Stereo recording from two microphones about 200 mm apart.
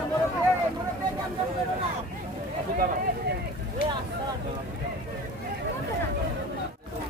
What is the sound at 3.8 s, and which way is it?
Vehicle, 45° left (ahead or behind).